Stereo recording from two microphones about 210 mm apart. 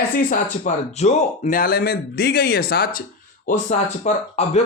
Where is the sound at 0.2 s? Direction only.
35° left (ahead or behind).